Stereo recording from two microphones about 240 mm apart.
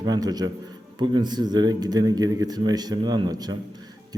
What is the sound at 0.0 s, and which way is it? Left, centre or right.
A man's voice, centre.